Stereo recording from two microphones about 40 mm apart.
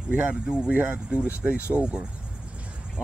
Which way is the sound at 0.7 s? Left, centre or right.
Right.